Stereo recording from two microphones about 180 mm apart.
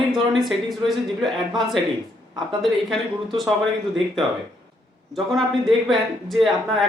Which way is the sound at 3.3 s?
Centre (ahead or behind).